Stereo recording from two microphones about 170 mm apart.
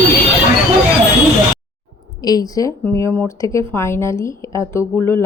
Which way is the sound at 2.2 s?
20° left (ahead or behind).